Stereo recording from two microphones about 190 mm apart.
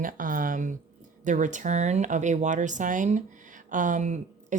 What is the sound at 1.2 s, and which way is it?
Speech, 40° right (ahead or behind).